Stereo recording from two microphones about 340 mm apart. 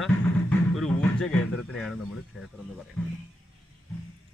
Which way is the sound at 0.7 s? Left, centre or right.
Centre.